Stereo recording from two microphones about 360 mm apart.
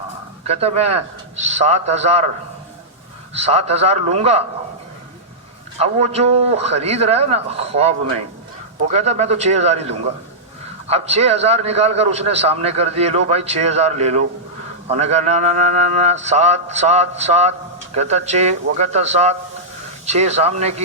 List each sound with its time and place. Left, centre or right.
0.4 s a man's voice: centre
3.3 s a man's voice: centre
5.8 s a man's voice: centre